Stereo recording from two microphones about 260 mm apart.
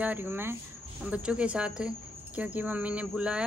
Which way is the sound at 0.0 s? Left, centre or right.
Centre.